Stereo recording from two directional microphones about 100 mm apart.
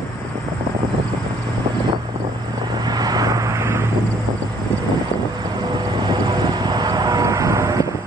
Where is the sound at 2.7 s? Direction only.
40° right (ahead or behind).